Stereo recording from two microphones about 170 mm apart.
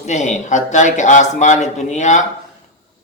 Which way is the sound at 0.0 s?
45° left (ahead or behind).